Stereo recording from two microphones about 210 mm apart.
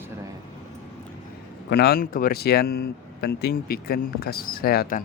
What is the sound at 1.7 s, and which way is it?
Speech, 50° left (ahead or behind).